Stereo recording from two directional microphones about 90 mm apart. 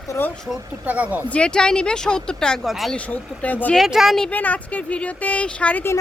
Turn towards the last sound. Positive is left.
turn(degrees=15)  # may be behind; listen again after turning